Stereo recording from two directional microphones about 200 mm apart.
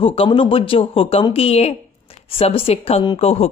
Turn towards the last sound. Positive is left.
turn(degrees=30)  # may be behind; listen again after turning